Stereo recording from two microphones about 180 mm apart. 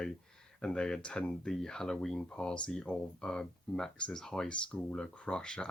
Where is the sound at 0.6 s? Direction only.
5° left (ahead or behind).